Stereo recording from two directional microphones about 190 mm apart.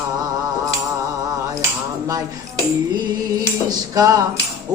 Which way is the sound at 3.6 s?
20° right (ahead or behind).